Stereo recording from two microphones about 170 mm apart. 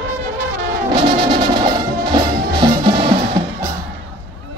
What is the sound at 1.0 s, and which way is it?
Music, 35° right (ahead or behind).